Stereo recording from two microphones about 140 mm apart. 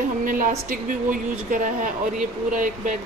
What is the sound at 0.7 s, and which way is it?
Speech, 85° right.